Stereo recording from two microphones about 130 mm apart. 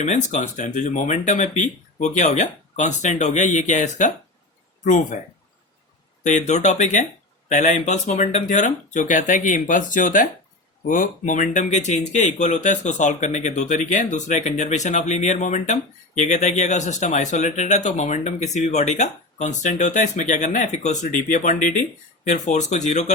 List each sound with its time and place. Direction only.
0.0 s speech: 65° left (ahead or behind)
6.2 s speech: 65° left (ahead or behind)